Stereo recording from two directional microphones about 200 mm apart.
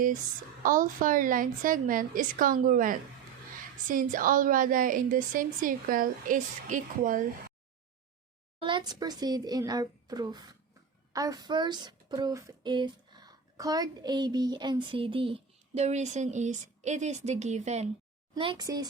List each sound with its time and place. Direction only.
0.6 s a woman's voice: 40° right (ahead or behind)
8.6 s speech: 20° right (ahead or behind)
18.3 s speech: 20° right (ahead or behind)